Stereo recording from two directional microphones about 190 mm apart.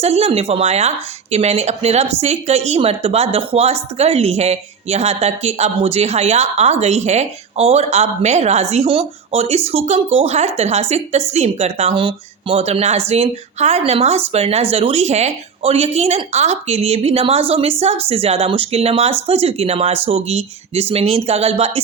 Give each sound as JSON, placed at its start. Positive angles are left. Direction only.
{"t": 0.0, "sound": "speech", "side_deg": -35}